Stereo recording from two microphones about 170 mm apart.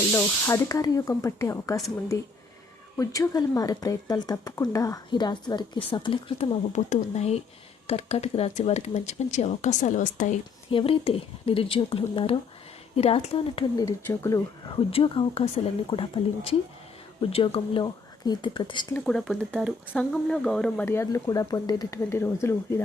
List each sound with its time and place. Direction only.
0.1 s speech: 15° left (ahead or behind)
3.0 s speech: 20° left (ahead or behind); by 10.2 s 50° left (ahead or behind)
10.7 s speech: 30° left (ahead or behind)
13.7 s speech: 20° left (ahead or behind)
14.8 s speech: 35° left (ahead or behind)
18.9 s speech: 5° left (ahead or behind)